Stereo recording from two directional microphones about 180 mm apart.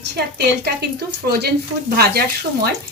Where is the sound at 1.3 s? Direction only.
60° right (ahead or behind).